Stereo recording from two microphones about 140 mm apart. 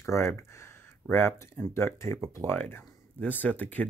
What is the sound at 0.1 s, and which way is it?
Speech, 20° left (ahead or behind).